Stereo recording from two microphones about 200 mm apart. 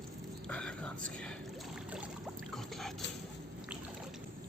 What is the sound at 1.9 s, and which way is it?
Boat, 5° right (ahead or behind).